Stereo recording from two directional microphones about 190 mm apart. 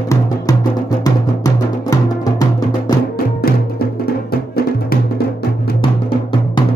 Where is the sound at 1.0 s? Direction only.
20° left (ahead or behind).